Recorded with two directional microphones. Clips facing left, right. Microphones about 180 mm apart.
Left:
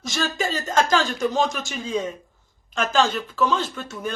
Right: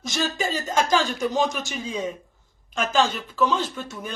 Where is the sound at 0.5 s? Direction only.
10° right (ahead or behind).